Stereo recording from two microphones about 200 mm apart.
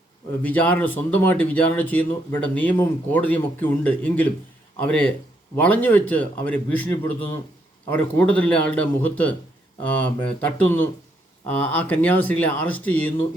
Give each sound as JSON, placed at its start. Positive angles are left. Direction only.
{"t": 0.4, "sound": "speech", "side_deg": 5}